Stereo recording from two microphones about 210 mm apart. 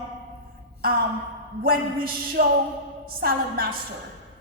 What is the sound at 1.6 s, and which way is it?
A woman's voice, 45° right (ahead or behind).